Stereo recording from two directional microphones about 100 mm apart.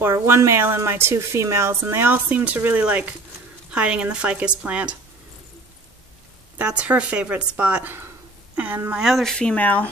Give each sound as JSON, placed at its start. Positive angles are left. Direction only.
{"t": 0.0, "sound": "a woman's voice", "side_deg": -25}
{"t": 6.6, "sound": "a woman's voice", "side_deg": -10}
{"t": 9.0, "sound": "speech", "side_deg": 0}